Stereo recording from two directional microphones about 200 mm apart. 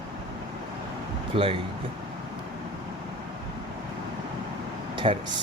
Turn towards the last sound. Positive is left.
turn(degrees=-25)  # may be behind; listen again after turning